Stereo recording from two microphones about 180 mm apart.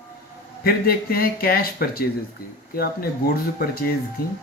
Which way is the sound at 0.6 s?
55° left (ahead or behind).